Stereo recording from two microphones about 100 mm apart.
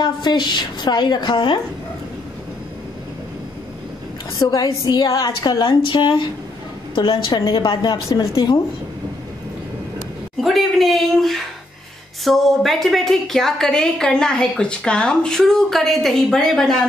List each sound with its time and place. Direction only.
0.0 s a woman's voice: 45° left (ahead or behind)
4.4 s a woman's voice: 35° left (ahead or behind)
10.4 s a woman's voice: centre (ahead or behind)